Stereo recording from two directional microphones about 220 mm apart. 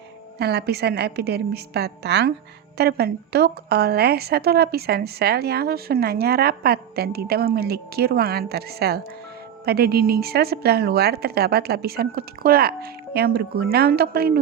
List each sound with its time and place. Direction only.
0.3 s a woman's voice: 50° right (ahead or behind)